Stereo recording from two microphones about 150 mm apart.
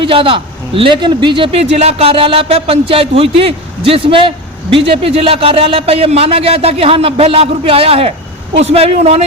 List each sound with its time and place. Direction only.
0.0 s a man's voice: 35° right (ahead or behind)